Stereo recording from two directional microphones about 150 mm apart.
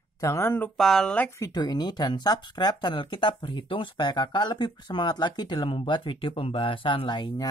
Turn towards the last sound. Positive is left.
turn(degrees=30)  # may be behind; listen again after turning